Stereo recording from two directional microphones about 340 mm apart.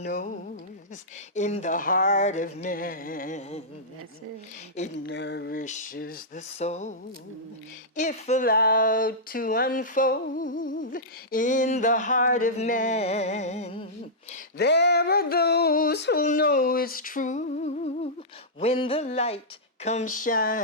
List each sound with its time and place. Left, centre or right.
0.0 s speech: left
1.4 s speech: centre
4.8 s speech: left
7.9 s speech: left
14.6 s speech: left
18.6 s a sound: centre
19.8 s speech: centre